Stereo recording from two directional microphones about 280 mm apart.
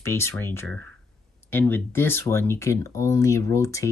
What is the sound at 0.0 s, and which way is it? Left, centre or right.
Speech, centre.